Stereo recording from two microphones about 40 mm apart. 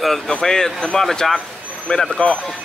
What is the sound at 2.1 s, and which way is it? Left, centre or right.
Speech, left.